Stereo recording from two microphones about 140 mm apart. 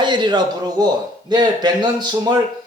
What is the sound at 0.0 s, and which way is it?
Speech, 35° right (ahead or behind).